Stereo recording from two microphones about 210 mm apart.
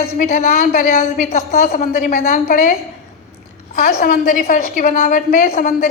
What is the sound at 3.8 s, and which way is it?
A woman's voice, 45° left (ahead or behind).